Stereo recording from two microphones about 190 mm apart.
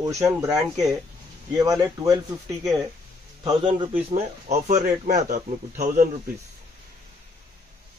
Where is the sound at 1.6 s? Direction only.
20° right (ahead or behind).